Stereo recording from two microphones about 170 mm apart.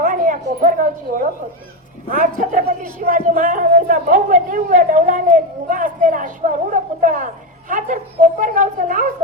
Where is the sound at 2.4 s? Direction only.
50° right (ahead or behind).